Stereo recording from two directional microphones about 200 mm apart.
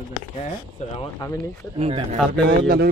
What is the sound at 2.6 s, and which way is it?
Speech, 50° right (ahead or behind).